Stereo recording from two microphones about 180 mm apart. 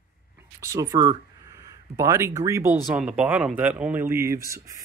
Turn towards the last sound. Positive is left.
turn(degrees=-15)  # may be behind; listen again after turning